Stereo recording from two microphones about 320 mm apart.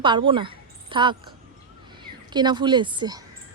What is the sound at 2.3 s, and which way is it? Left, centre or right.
Speech, centre.